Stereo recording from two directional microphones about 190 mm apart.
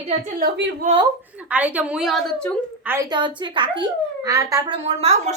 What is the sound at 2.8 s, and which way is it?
Speech, 10° right (ahead or behind).